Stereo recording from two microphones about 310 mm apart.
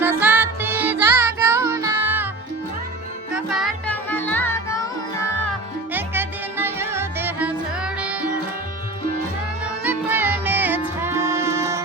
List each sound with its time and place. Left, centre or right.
0.0 s music: centre
3.3 s music: centre
5.9 s music: centre
9.8 s music: centre